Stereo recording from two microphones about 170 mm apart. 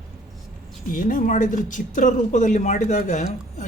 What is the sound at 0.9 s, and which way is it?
Speech, 50° left (ahead or behind).